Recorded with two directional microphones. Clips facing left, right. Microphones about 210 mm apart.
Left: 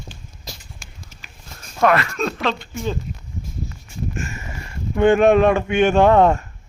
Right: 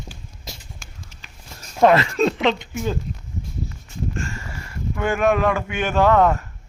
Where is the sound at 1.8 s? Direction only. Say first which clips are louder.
Right 3 dB; 25° right (ahead or behind).